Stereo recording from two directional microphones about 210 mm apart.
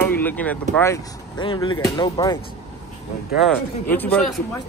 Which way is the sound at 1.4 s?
25° left (ahead or behind).